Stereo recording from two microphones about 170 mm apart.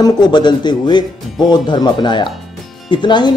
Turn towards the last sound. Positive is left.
turn(degrees=25)  # may be behind; listen again after turning